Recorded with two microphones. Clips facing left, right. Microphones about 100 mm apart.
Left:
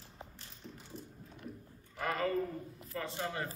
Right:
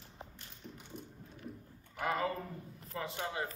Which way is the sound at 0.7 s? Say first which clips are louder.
Even; 15° right (ahead or behind).